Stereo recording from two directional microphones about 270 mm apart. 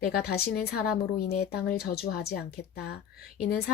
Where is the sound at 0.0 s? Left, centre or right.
Left.